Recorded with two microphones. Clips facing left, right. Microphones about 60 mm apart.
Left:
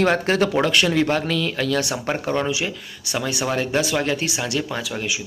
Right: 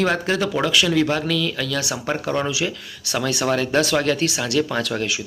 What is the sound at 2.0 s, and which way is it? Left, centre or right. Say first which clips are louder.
Speech: even; left.